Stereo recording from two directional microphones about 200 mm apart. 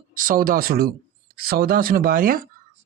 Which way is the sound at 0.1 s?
45° right (ahead or behind).